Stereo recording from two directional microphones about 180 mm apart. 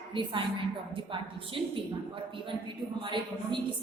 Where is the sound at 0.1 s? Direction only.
30° right (ahead or behind).